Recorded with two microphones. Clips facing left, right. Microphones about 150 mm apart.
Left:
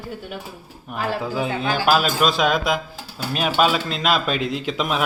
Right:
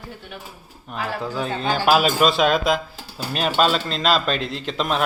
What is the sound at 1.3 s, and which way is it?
A man's voice, 10° left (ahead or behind).